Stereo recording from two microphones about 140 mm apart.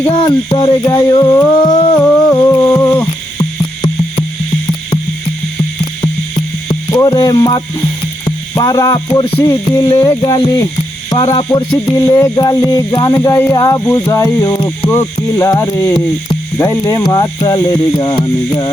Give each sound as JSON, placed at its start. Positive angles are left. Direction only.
{"t": 0.2, "sound": "music", "side_deg": 30}
{"t": 1.0, "sound": "speech", "side_deg": 25}
{"t": 2.8, "sound": "a sound", "side_deg": 15}
{"t": 6.9, "sound": "speech", "side_deg": 25}
{"t": 8.2, "sound": "music", "side_deg": 25}
{"t": 11.9, "sound": "speech", "side_deg": 30}